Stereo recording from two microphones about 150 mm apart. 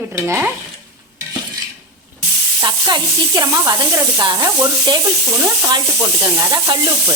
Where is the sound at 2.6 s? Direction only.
30° right (ahead or behind).